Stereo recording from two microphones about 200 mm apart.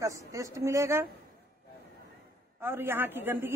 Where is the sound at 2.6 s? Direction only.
10° right (ahead or behind).